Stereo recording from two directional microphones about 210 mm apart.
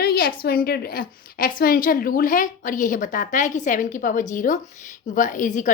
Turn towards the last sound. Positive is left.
turn(degrees=35)  # may be behind; listen again after turning